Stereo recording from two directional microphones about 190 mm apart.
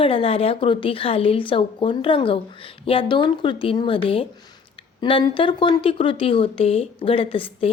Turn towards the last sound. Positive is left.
turn(degrees=30)  # may be behind; listen again after turning